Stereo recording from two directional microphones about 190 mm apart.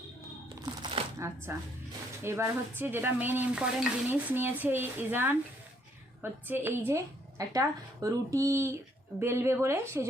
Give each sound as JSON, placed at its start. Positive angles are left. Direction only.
{"t": 0.6, "sound": "music", "side_deg": -25}
{"t": 1.5, "sound": "speech", "side_deg": -15}
{"t": 6.5, "sound": "speech", "side_deg": -10}